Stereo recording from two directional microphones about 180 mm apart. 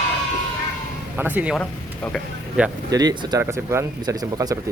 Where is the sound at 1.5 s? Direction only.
5° left (ahead or behind).